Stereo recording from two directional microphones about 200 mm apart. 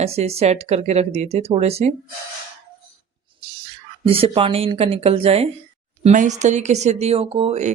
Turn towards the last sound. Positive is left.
turn(degrees=-30)  # may be behind; listen again after turning